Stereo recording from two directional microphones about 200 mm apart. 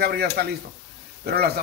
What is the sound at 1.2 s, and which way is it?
Speech, 50° right (ahead or behind).